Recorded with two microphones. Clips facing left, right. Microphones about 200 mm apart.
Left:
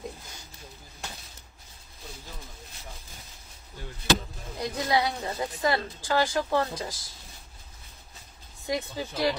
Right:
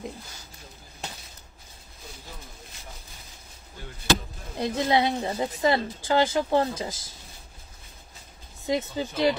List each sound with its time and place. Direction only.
4.6 s speech: 25° right (ahead or behind)
8.6 s speech: 20° right (ahead or behind)